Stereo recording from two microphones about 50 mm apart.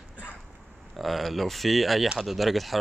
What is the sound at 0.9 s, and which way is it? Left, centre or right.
Speech, centre.